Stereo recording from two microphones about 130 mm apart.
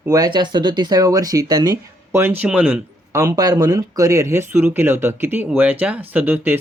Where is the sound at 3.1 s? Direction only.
25° right (ahead or behind).